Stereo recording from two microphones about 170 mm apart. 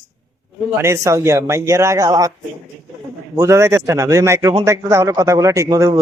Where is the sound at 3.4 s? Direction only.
15° right (ahead or behind).